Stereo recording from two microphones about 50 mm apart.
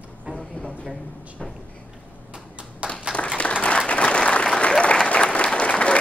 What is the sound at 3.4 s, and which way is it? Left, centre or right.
Applause, left.